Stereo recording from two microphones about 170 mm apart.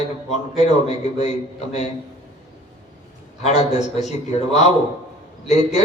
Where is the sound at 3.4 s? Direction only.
40° left (ahead or behind).